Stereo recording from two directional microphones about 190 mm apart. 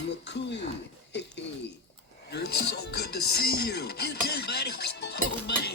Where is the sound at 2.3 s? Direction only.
60° left (ahead or behind).